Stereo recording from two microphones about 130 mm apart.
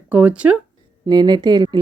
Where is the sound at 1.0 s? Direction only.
35° right (ahead or behind).